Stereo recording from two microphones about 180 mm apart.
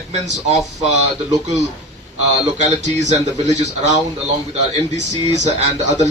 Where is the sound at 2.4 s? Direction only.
40° right (ahead or behind).